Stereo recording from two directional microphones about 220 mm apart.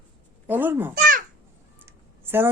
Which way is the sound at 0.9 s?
40° right (ahead or behind).